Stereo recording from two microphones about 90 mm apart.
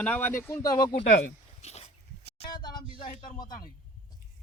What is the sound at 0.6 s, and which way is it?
Speech, 50° left (ahead or behind).